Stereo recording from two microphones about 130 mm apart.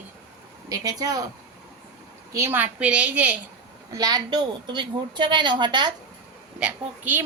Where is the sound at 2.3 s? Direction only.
15° right (ahead or behind).